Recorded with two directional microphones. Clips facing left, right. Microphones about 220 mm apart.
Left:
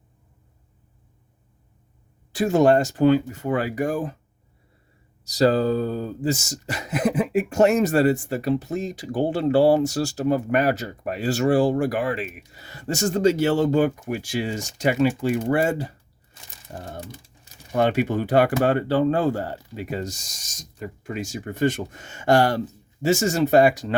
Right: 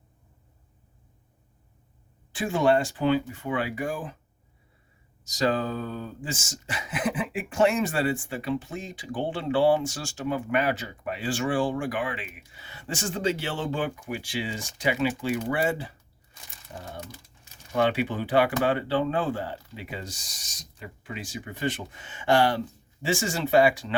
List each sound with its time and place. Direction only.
2.3 s speech: 40° left (ahead or behind)
5.2 s speech: 35° left (ahead or behind)
17.7 s speech: 45° left (ahead or behind)